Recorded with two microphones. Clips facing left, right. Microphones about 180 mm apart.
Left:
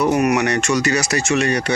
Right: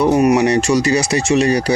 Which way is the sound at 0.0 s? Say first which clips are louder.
Right 4 dB; 30° right (ahead or behind).